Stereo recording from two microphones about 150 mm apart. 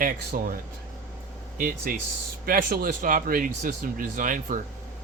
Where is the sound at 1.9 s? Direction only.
70° right (ahead or behind).